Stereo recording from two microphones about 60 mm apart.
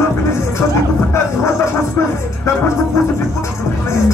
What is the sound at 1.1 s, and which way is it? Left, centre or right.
Music, left.